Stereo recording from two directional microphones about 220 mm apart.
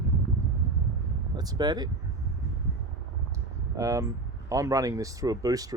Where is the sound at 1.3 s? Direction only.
15° right (ahead or behind).